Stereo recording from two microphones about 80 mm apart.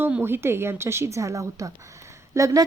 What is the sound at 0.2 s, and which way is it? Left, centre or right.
Speech, right.